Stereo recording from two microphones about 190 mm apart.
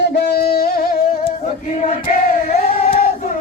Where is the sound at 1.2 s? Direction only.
35° left (ahead or behind).